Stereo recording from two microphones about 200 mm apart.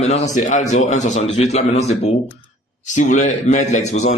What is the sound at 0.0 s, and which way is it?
A man's voice, 30° left (ahead or behind).